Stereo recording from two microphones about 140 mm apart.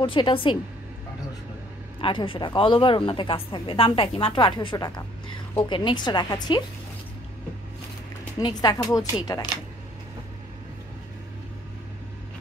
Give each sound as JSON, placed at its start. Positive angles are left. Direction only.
{"t": 0.0, "sound": "speech", "side_deg": 35}
{"t": 2.0, "sound": "speech", "side_deg": 40}
{"t": 8.4, "sound": "speech", "side_deg": 30}